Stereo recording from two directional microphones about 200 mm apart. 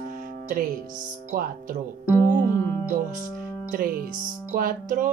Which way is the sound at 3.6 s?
45° right (ahead or behind).